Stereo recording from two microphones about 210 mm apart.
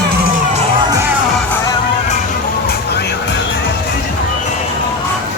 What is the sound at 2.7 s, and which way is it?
Vehicle, 50° left (ahead or behind).